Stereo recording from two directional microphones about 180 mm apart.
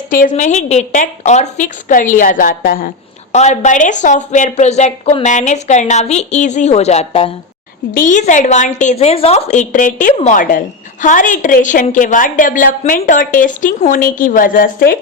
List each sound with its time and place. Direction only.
0.1 s a woman's voice: 45° left (ahead or behind)
3.3 s a woman's voice: 40° left (ahead or behind)
7.9 s a woman's voice: 45° left (ahead or behind)